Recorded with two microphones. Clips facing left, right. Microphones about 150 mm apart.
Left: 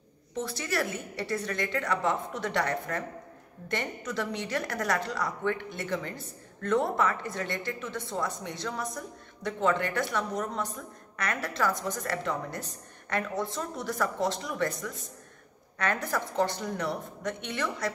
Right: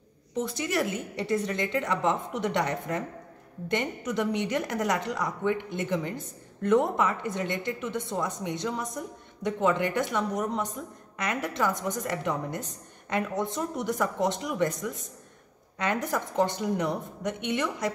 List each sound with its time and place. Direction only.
0.3 s a woman's voice: 20° right (ahead or behind)